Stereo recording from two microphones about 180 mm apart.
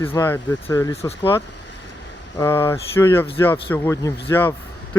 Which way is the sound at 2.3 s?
15° left (ahead or behind).